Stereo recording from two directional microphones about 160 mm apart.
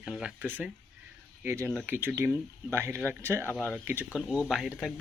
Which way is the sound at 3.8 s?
10° right (ahead or behind).